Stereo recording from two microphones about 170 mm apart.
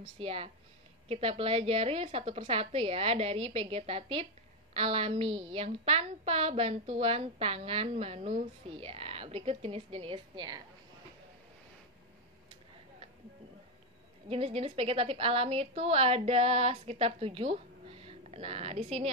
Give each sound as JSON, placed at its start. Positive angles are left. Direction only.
{"t": 0.2, "sound": "a woman's voice", "side_deg": -35}
{"t": 14.3, "sound": "a woman's voice", "side_deg": -35}